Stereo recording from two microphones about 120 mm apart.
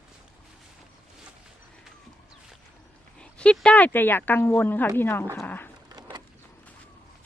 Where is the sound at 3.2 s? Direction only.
10° left (ahead or behind).